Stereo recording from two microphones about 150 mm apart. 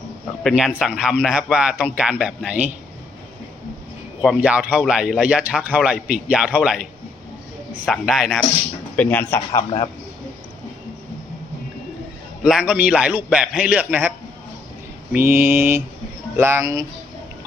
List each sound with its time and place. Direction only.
0.4 s a man's voice: 5° right (ahead or behind)
4.2 s a man's voice: 5° right (ahead or behind)
7.9 s speech: centre (ahead or behind)
9.0 s speech: 10° left (ahead or behind)
9.5 s a man's voice: 35° left (ahead or behind)
12.4 s a man's voice: 5° right (ahead or behind)
15.1 s a man's voice: 15° right (ahead or behind)